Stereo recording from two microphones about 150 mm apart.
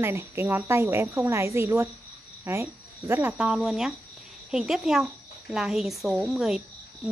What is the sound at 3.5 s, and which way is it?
A woman's voice, centre (ahead or behind).